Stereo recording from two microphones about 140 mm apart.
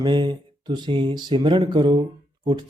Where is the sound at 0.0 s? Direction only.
30° right (ahead or behind).